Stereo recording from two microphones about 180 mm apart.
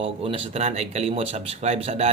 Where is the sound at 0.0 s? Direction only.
35° right (ahead or behind).